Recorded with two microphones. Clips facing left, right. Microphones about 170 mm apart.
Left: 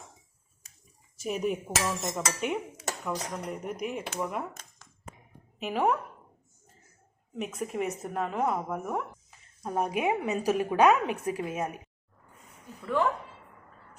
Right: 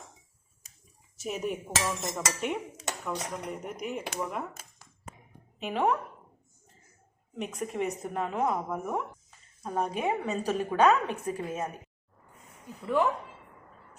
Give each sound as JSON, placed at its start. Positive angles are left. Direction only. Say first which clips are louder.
{"t": 1.2, "sound": "a woman's voice", "louder": "left 3 dB", "side_deg": 0}
{"t": 7.3, "sound": "a woman's voice", "louder": "even", "side_deg": 5}
{"t": 9.6, "sound": "a woman's voice", "louder": "left 2 dB", "side_deg": 10}
{"t": 12.8, "sound": "a woman's voice", "louder": "right 1 dB", "side_deg": -15}